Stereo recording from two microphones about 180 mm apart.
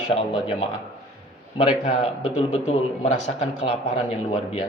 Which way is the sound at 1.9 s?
35° left (ahead or behind).